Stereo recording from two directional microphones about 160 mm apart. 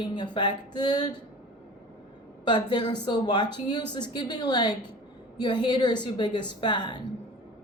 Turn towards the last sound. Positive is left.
turn(degrees=30)  # may be behind; listen again after turning